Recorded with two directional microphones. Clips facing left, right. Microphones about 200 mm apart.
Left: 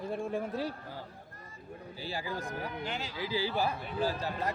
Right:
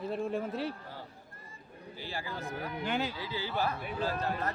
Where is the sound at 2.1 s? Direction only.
15° left (ahead or behind).